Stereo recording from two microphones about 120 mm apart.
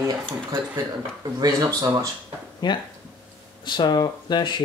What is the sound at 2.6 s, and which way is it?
Speech, 35° left (ahead or behind).